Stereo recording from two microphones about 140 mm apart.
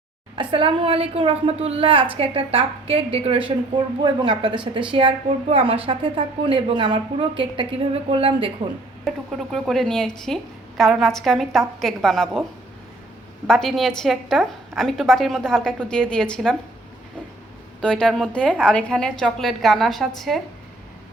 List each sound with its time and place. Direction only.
0.3 s a woman's voice: 40° right (ahead or behind)
9.0 s a woman's voice: centre (ahead or behind)
13.5 s a woman's voice: 5° left (ahead or behind)
17.7 s a woman's voice: 5° left (ahead or behind)